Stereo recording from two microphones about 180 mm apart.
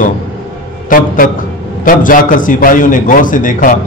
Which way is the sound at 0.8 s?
50° left (ahead or behind).